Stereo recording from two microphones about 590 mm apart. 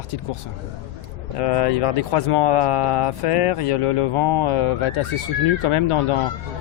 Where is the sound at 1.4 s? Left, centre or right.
Left.